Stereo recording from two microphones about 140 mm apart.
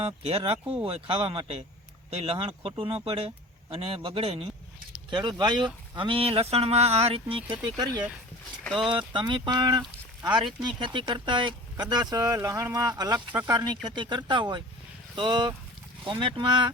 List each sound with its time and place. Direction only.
0.0 s speech: 45° right (ahead or behind)
7.5 s speech: 30° right (ahead or behind)